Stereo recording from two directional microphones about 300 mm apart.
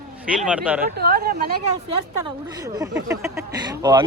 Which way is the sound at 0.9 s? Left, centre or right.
Right.